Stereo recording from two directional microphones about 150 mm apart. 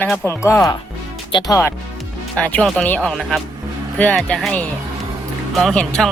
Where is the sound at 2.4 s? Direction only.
10° left (ahead or behind).